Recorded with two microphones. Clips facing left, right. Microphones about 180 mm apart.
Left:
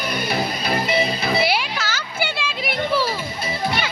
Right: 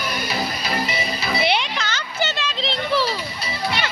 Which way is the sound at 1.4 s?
5° left (ahead or behind).